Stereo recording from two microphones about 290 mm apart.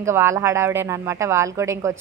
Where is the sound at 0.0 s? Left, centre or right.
Centre.